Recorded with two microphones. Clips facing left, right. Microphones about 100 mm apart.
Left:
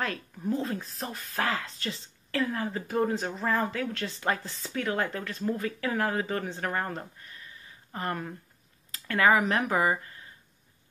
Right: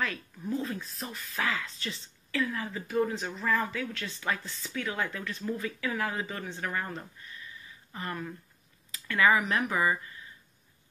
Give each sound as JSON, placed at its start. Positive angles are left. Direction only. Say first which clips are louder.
{"t": 0.0, "sound": "speech", "louder": "left 2 dB", "side_deg": 40}